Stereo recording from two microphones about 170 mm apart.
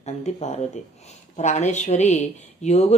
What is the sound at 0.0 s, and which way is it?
A woman's voice, 40° left (ahead or behind).